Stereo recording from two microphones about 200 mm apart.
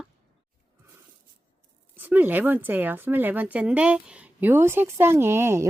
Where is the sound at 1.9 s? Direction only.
10° right (ahead or behind).